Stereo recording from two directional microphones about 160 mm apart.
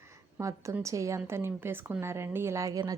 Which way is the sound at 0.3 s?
20° right (ahead or behind).